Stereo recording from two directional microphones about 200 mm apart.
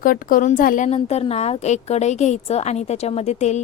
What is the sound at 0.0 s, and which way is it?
Speech, 45° left (ahead or behind).